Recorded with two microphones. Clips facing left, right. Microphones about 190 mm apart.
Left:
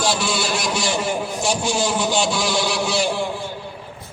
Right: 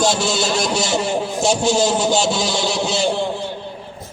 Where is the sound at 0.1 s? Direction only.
25° right (ahead or behind).